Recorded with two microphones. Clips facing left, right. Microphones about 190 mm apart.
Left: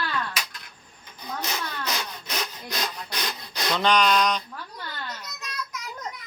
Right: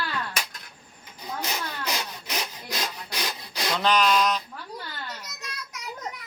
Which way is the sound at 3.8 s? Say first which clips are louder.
Left 1 dB; 5° right (ahead or behind).